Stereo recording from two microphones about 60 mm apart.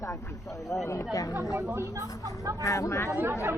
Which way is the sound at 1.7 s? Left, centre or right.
Right.